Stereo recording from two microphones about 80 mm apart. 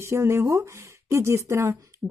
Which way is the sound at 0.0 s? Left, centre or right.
Right.